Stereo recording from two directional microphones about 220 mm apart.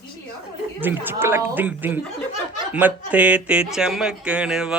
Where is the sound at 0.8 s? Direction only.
10° right (ahead or behind).